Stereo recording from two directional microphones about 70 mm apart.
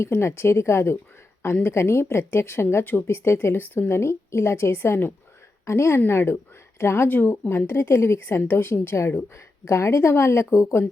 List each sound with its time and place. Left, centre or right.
0.0 s speech: left
5.6 s a woman's voice: left
7.7 s speech: left